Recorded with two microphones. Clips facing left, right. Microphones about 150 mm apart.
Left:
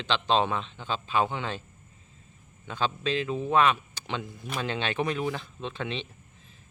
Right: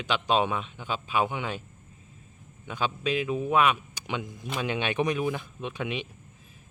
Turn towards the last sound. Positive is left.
turn(degrees=-10)  # may be behind; listen again after turning